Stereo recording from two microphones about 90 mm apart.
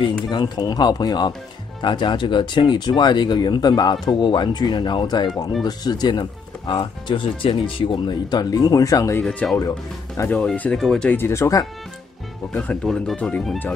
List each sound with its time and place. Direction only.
0.0 s speech: 60° left (ahead or behind)
1.8 s speech: 60° left (ahead or behind); by 9.2 s 40° left (ahead or behind)
9.2 s speech: 15° left (ahead or behind)
9.6 s speech: 40° left (ahead or behind)
10.4 s speech: 15° left (ahead or behind)
11.1 s speech: 25° left (ahead or behind)
12.5 s speech: 10° left (ahead or behind)